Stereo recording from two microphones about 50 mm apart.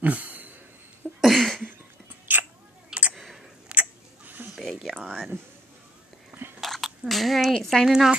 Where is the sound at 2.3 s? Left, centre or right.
Right.